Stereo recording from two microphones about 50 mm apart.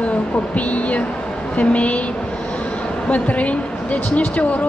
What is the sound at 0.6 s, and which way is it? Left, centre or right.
A woman's voice, left.